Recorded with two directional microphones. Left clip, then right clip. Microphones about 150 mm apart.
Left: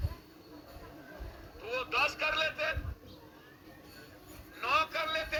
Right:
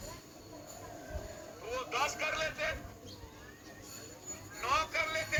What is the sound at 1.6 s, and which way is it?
Speech, 40° left (ahead or behind).